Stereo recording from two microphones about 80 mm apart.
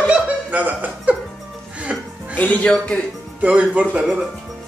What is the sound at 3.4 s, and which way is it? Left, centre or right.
Speech, centre.